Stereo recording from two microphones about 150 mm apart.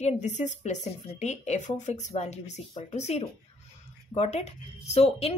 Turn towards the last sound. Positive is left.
turn(degrees=45)  # may be behind; listen again after turning